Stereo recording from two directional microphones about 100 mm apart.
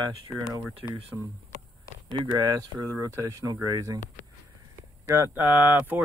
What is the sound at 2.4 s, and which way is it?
Speech, 40° right (ahead or behind).